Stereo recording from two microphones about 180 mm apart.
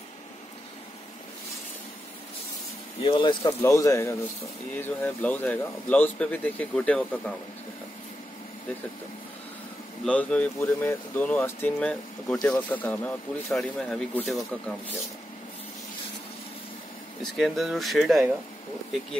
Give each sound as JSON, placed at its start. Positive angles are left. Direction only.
{"t": 3.0, "sound": "speech", "side_deg": 25}
{"t": 10.0, "sound": "speech", "side_deg": 5}
{"t": 17.2, "sound": "speech", "side_deg": 0}